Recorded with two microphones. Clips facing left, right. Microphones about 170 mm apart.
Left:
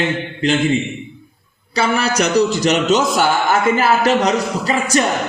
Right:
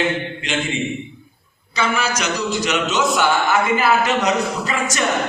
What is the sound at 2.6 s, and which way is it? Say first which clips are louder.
A man's voice: left 5 dB; 40° left (ahead or behind).